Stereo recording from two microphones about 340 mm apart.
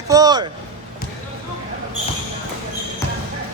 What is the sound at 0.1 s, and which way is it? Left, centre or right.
Speech, centre.